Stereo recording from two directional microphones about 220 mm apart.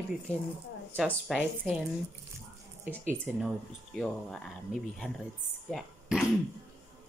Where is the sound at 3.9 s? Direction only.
5° left (ahead or behind).